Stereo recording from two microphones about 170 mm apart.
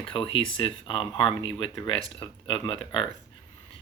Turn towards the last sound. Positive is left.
turn(degrees=30)  # may be behind; listen again after turning